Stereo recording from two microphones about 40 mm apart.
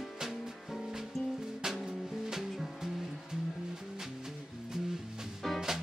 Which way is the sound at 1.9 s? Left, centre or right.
Centre.